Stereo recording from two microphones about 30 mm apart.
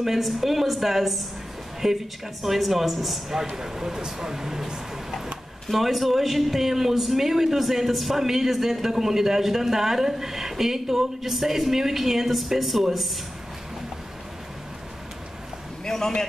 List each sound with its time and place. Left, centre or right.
0.0 s speech: centre
3.5 s speech: centre
5.7 s speech: centre
15.8 s a sound: centre